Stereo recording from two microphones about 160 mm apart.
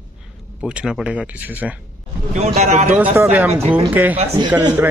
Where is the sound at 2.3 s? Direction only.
40° right (ahead or behind).